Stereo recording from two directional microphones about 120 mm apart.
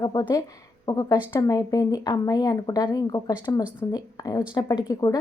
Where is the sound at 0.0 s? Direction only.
35° left (ahead or behind).